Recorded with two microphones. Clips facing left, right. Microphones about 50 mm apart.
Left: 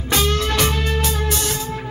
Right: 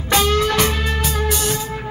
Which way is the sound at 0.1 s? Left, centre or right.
Centre.